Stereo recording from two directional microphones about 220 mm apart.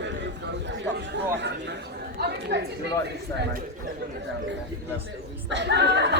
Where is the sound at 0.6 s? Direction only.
55° right (ahead or behind).